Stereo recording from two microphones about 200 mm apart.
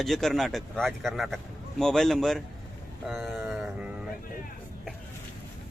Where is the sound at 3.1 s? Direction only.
Centre (ahead or behind).